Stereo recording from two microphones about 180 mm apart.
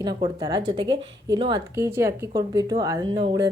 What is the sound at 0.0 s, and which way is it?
A woman's voice, 25° right (ahead or behind).